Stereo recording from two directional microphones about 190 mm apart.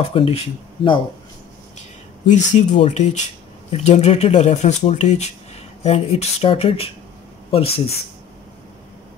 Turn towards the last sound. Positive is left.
turn(degrees=30)  # may be behind; listen again after turning